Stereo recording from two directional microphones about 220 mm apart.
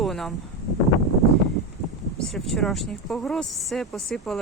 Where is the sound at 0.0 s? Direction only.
Centre (ahead or behind).